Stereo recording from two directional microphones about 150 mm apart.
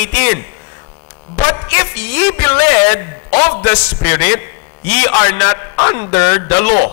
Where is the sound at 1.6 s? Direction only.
15° left (ahead or behind).